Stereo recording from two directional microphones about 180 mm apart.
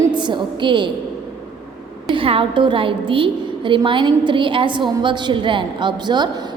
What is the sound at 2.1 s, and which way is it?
A woman's voice, 30° right (ahead or behind).